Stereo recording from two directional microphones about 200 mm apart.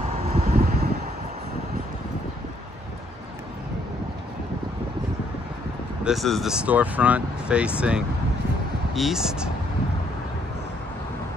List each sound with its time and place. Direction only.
0.3 s wind: 45° right (ahead or behind)
6.0 s speech: centre (ahead or behind)